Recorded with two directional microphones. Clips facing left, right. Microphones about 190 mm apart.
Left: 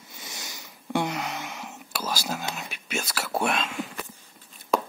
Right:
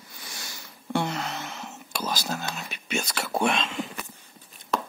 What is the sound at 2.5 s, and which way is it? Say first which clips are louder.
Whispering: right 2 dB; 5° left (ahead or behind).